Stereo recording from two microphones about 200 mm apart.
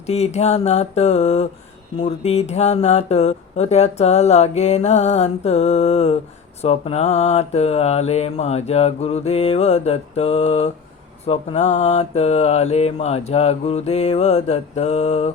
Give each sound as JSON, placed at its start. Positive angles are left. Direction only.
{"t": 0.1, "sound": "speech", "side_deg": 35}